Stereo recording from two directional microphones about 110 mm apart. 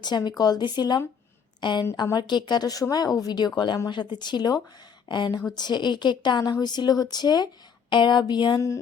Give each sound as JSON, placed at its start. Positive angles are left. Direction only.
{"t": 0.0, "sound": "a woman's voice", "side_deg": 40}